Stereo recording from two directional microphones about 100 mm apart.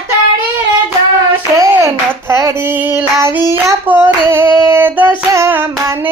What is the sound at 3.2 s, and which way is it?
Child singing, 25° right (ahead or behind).